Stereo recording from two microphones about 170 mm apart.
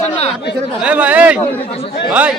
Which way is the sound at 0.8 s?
5° right (ahead or behind).